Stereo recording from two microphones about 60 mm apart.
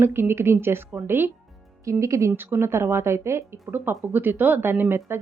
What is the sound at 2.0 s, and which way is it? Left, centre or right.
Speech, right.